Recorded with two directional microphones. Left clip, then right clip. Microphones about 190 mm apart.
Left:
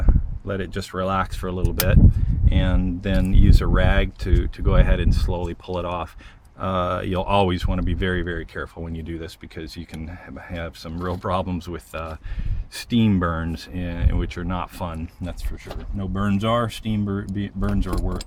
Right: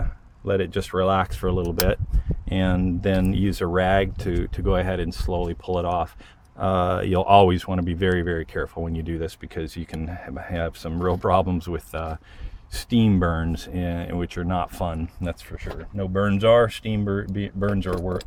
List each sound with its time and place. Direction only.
0.4 s speech: 50° right (ahead or behind)